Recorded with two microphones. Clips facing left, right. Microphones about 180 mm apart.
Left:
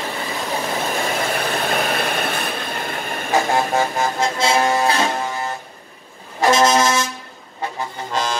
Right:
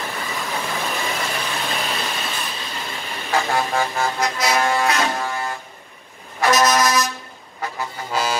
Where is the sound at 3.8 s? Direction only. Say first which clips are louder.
Left 2 dB; 25° left (ahead or behind).